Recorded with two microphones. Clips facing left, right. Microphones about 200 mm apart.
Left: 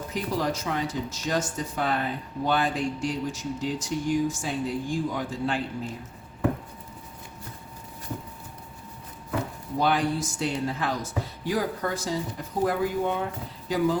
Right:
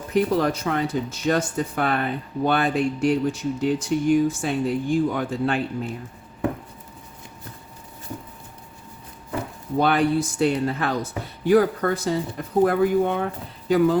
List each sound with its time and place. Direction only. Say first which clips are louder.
0.1 s speech: right 8 dB; 60° right (ahead or behind)
9.7 s speech: right 5 dB; 60° right (ahead or behind)